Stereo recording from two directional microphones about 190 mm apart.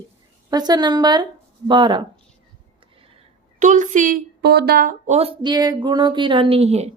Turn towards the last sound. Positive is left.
turn(degrees=-35)  # may be behind; listen again after turning